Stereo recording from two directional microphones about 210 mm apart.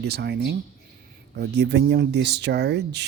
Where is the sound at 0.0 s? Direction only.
50° right (ahead or behind).